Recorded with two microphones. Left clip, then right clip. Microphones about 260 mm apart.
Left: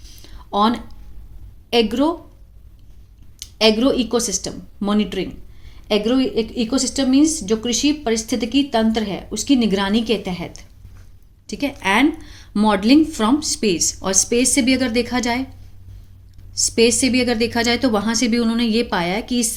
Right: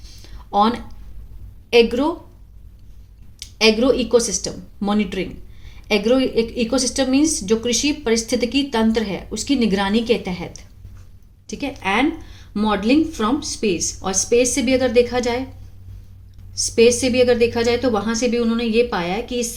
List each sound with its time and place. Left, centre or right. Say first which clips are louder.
0.0 s a sound: even; centre
1.7 s speech: right 2 dB; centre
3.3 s speech: even; centre
16.6 s speech: right 1 dB; centre